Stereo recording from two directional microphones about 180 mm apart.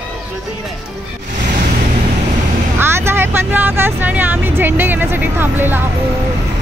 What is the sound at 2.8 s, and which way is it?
Speech, 15° right (ahead or behind).